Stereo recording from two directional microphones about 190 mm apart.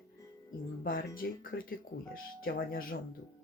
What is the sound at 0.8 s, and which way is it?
Speech, 50° left (ahead or behind).